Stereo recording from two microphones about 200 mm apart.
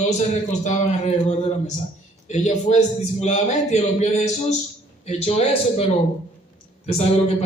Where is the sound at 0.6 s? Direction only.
35° left (ahead or behind).